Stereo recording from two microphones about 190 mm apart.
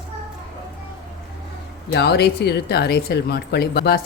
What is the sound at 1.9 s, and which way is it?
Speech, 60° left (ahead or behind).